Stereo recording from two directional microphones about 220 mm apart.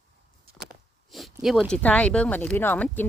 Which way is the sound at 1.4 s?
Centre (ahead or behind).